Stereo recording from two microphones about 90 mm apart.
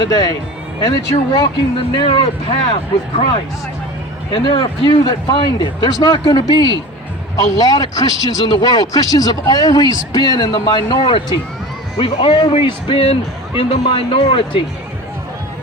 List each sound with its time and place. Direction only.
0.0 s speech: 45° left (ahead or behind)
0.9 s speech: 60° left (ahead or behind)
4.3 s speech: 65° left (ahead or behind)
11.9 s speech: 75° left (ahead or behind)